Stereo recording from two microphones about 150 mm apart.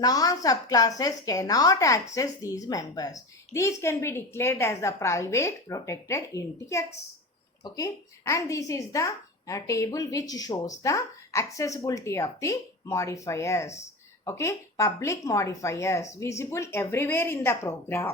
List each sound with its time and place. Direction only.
0.0 s a woman's voice: 25° left (ahead or behind)